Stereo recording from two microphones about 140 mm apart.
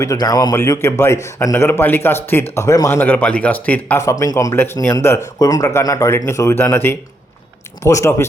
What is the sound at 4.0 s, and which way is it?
Speech, 20° left (ahead or behind).